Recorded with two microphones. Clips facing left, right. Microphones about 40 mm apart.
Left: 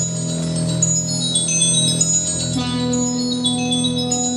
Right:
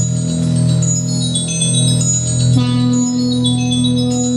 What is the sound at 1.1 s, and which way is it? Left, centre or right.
Music, right.